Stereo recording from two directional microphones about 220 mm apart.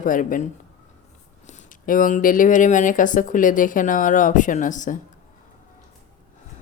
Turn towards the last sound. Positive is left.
turn(degrees=35)  # may be behind; listen again after turning